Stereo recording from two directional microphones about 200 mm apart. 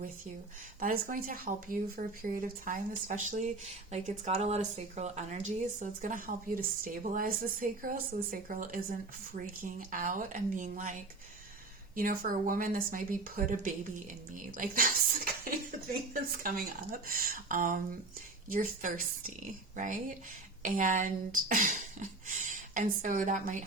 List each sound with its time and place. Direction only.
0.8 s a woman's voice: 45° right (ahead or behind)
11.9 s speech: 45° right (ahead or behind)
16.9 s a woman's voice: 45° right (ahead or behind)